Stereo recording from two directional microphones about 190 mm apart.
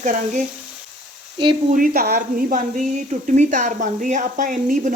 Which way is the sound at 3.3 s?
40° right (ahead or behind).